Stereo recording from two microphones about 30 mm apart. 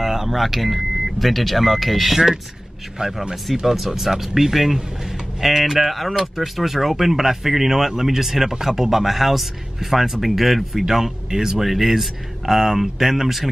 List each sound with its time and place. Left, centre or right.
0.0 s speech: centre
3.0 s speech: right
3.6 s speech: centre
11.2 s speech: centre
11.6 s speech: centre